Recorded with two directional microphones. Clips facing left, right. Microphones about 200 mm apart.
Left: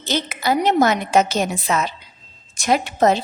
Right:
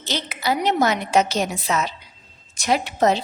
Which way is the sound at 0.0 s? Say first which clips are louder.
Left 3 dB; 50° left (ahead or behind).